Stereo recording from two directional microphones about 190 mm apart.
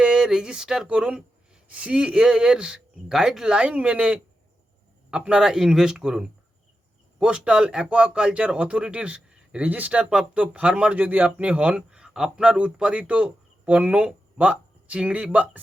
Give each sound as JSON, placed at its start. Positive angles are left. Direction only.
{"t": 0.0, "sound": "speech", "side_deg": -5}